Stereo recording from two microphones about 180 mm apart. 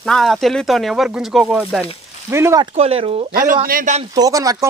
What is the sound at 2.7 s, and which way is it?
Speech, 35° right (ahead or behind).